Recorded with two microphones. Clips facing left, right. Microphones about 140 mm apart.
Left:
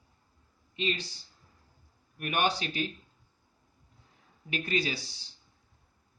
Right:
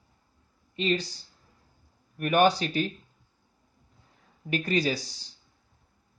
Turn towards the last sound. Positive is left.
turn(degrees=-40)  # may be behind; listen again after turning